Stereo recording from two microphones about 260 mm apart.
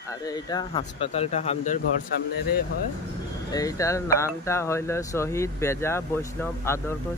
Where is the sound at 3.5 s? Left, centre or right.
Centre.